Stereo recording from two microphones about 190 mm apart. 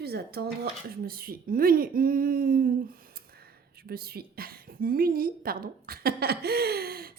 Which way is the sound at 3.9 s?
55° right (ahead or behind).